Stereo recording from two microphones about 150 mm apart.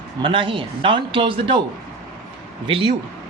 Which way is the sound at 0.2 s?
35° right (ahead or behind).